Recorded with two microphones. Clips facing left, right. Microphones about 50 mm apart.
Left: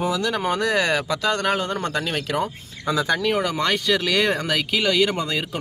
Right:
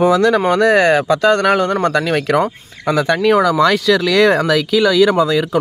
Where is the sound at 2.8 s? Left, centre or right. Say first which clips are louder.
Right 7 dB; right.